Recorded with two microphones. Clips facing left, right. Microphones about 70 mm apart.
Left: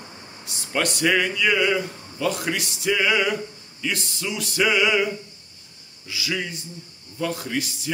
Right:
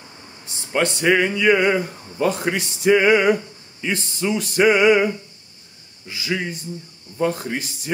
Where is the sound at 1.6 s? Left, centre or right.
Right.